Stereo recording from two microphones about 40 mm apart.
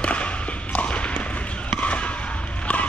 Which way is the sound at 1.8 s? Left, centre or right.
Left.